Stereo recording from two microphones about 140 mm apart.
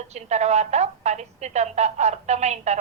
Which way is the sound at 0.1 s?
55° right (ahead or behind).